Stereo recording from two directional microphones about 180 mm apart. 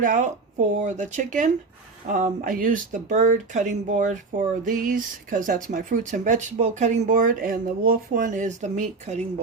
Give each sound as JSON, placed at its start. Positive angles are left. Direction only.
{"t": 0.0, "sound": "speech", "side_deg": -45}